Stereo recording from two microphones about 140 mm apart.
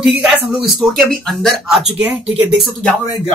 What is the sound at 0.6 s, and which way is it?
Speech, centre (ahead or behind).